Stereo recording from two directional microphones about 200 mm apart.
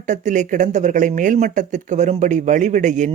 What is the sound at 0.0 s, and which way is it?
Speech, 40° right (ahead or behind).